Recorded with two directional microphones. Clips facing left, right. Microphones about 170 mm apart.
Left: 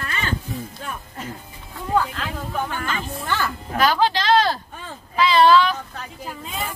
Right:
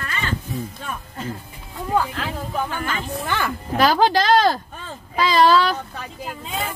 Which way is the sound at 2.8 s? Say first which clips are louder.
Right 2 dB; 10° right (ahead or behind).